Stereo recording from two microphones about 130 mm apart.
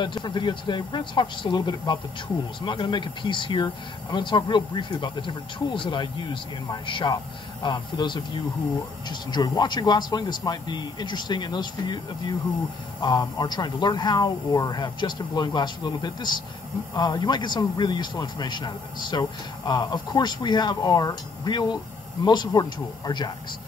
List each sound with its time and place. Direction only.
0.0 s a man's voice: 35° left (ahead or behind)